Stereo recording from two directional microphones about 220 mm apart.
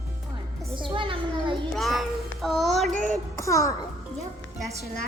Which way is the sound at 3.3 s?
15° left (ahead or behind).